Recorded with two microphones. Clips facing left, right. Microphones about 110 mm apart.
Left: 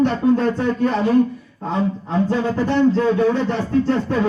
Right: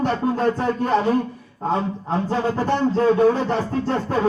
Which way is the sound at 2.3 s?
35° right (ahead or behind).